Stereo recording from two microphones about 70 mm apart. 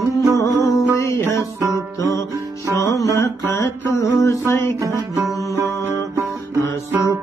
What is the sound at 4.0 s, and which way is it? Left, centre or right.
Music, left.